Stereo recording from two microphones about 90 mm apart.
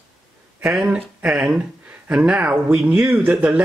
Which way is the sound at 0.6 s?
10° right (ahead or behind).